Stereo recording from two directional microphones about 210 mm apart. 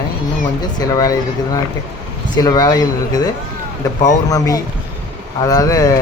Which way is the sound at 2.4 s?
15° left (ahead or behind).